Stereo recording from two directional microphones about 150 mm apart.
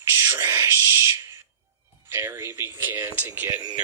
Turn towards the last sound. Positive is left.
turn(degrees=-10)  # may be behind; listen again after turning